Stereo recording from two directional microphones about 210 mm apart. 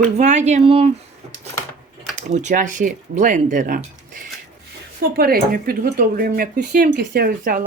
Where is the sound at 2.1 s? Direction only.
35° right (ahead or behind).